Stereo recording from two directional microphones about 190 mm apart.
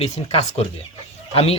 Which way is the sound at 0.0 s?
35° left (ahead or behind).